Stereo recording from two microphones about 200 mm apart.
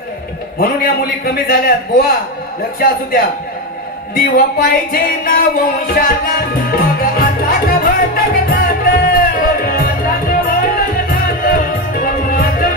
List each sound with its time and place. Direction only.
0.6 s a man's voice: 50° left (ahead or behind)
8.5 s music: 45° left (ahead or behind)